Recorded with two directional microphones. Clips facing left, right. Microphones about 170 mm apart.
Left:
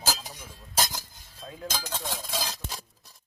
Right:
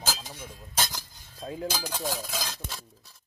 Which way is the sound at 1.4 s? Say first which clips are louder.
Right 6 dB; 35° right (ahead or behind).